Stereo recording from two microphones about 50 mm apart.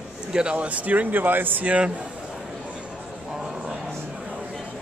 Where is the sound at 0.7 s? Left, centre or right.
Right.